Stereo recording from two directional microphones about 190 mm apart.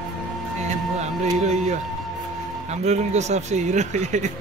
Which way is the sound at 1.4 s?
40° right (ahead or behind).